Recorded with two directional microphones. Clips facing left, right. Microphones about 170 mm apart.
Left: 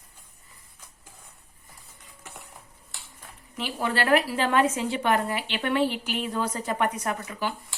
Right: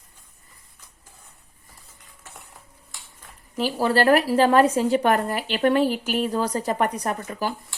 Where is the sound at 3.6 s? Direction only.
35° right (ahead or behind).